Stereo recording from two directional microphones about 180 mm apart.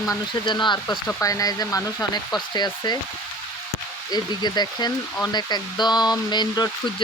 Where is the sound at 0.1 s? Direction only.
25° left (ahead or behind).